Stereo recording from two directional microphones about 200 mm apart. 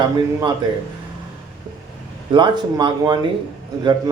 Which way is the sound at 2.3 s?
25° right (ahead or behind).